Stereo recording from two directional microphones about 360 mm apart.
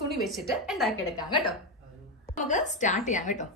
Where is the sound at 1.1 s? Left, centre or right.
Centre.